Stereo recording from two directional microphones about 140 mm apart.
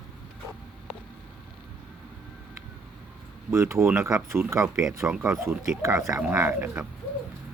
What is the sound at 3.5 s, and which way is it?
Speech, 20° right (ahead or behind).